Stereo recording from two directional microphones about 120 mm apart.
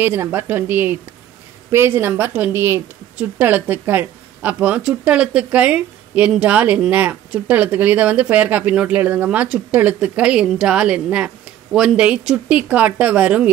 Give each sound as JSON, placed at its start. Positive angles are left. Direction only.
{"t": 0.0, "sound": "a woman's voice", "side_deg": -20}